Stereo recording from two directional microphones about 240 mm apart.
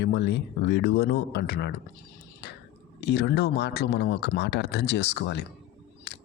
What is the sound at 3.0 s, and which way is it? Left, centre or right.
Speech, left.